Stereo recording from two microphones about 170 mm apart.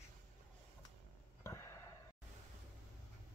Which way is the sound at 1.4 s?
15° left (ahead or behind).